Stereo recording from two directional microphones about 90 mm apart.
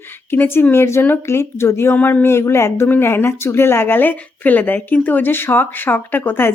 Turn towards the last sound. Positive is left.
turn(degrees=25)  # may be behind; listen again after turning